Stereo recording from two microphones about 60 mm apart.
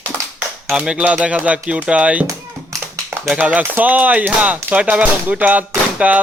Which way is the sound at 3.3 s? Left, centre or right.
Right.